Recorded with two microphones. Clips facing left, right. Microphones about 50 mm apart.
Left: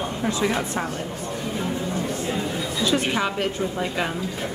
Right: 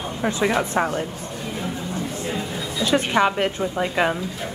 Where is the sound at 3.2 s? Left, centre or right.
Right.